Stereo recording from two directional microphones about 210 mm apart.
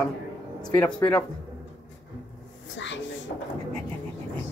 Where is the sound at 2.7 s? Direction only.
60° left (ahead or behind).